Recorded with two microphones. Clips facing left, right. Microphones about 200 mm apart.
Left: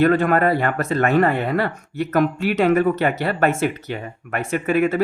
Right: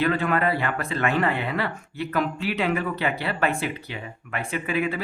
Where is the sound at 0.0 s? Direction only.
50° left (ahead or behind).